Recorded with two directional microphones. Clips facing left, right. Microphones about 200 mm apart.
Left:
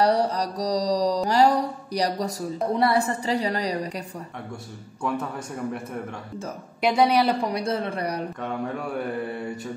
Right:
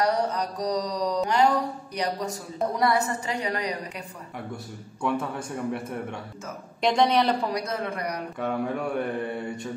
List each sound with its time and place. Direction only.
0.0 s mantra: 35° left (ahead or behind)
2.7 s a woman's voice: 30° left (ahead or behind)
5.0 s speech: centre (ahead or behind)
6.8 s speech: 10° left (ahead or behind)
7.5 s a woman's voice: 30° left (ahead or behind)
8.4 s speech: centre (ahead or behind)